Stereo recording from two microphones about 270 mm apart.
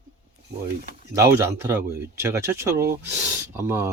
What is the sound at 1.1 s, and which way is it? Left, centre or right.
Speech, centre.